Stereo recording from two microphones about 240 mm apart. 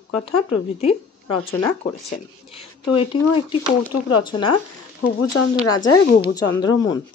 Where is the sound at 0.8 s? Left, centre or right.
Left.